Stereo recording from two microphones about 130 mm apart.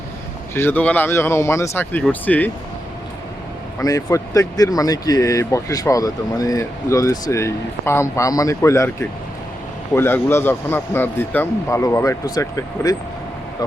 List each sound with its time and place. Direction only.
0.5 s speech: 15° left (ahead or behind)
3.8 s speech: 25° left (ahead or behind)